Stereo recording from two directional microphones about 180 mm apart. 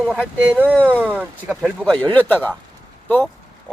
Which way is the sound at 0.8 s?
10° left (ahead or behind).